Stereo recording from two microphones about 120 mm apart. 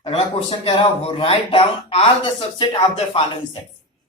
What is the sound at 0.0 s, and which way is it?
Speech, 50° left (ahead or behind).